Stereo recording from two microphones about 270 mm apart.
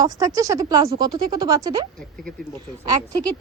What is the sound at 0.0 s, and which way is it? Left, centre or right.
A woman's voice, centre.